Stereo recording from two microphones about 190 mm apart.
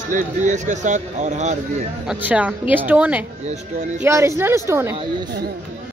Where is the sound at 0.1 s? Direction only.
40° right (ahead or behind).